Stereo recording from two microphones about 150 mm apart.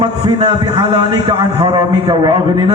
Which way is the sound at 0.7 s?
30° right (ahead or behind).